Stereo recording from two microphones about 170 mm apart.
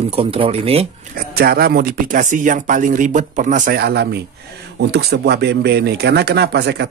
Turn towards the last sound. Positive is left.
turn(degrees=-75)  # may be behind; listen again after turning